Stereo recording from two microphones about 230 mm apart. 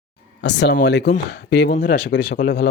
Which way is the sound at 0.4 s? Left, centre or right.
Left.